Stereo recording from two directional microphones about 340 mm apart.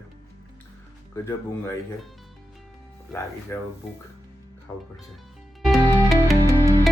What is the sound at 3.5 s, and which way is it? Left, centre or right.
Speech, centre.